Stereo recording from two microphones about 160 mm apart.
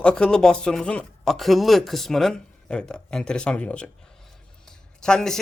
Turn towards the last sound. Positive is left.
turn(degrees=5)  # may be behind; listen again after turning